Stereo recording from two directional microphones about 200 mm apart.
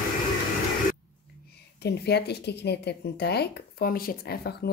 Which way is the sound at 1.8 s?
55° left (ahead or behind).